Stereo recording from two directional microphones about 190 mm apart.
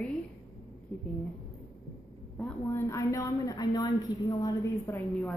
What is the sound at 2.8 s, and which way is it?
A woman's voice, 15° left (ahead or behind).